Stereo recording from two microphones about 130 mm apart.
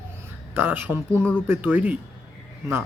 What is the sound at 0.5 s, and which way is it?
Speech, 15° right (ahead or behind).